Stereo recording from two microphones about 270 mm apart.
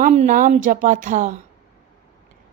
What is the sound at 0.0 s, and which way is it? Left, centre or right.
A woman's voice, right.